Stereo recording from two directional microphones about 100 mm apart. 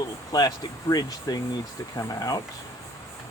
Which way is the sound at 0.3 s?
40° left (ahead or behind).